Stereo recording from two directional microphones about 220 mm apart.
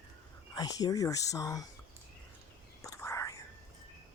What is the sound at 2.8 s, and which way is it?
Whispering, 15° left (ahead or behind).